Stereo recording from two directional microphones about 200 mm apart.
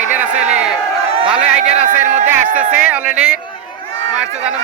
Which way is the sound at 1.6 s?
35° right (ahead or behind).